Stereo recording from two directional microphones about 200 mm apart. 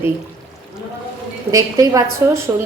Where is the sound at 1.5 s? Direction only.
15° right (ahead or behind).